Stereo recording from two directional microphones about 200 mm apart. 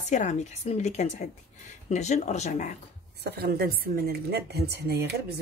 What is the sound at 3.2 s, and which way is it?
A woman's voice, 55° right (ahead or behind).